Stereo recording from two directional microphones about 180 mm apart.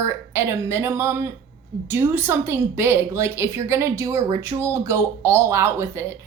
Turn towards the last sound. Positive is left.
turn(degrees=-15)  # may be behind; listen again after turning